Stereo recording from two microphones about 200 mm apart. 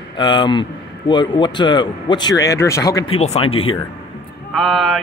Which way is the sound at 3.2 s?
30° left (ahead or behind).